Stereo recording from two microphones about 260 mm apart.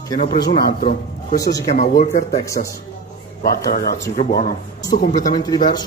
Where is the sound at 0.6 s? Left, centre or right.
Left.